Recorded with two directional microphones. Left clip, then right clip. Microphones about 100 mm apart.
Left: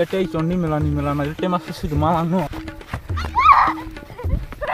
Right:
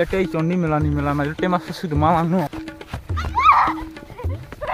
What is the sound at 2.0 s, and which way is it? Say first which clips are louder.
Speech: right 2 dB; 30° right (ahead or behind).